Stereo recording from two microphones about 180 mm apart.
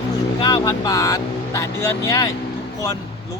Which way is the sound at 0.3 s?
25° left (ahead or behind).